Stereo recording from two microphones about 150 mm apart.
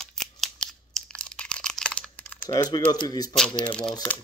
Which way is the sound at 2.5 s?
25° left (ahead or behind).